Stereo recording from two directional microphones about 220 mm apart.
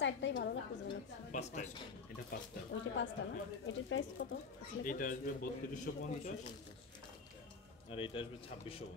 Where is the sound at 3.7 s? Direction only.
60° left (ahead or behind).